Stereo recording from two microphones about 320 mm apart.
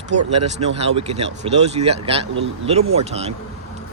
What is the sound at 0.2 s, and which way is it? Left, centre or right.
Speech, centre.